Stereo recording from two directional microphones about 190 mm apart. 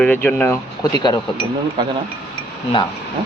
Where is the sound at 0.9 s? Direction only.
20° left (ahead or behind).